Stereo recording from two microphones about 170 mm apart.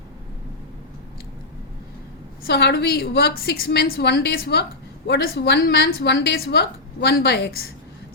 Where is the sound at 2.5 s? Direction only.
75° left (ahead or behind).